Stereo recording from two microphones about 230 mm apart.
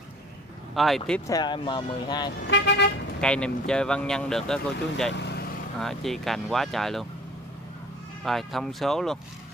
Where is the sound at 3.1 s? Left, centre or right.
Centre.